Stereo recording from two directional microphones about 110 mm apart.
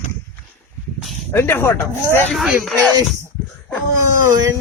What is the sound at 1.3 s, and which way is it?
Speech, 20° left (ahead or behind).